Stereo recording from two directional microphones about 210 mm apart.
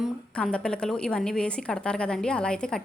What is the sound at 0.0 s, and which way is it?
A woman's voice, 5° left (ahead or behind).